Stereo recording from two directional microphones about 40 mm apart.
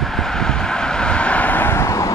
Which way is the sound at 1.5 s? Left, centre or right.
Left.